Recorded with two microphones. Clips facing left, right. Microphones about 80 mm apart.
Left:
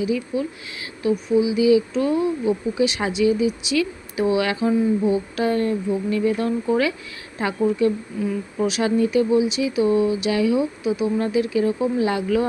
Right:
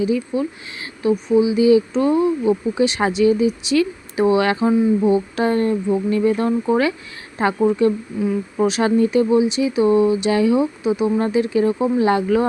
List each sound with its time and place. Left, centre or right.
0.0 s speech: right